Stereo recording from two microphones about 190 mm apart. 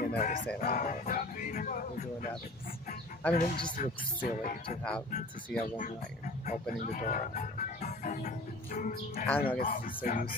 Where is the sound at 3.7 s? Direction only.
45° left (ahead or behind).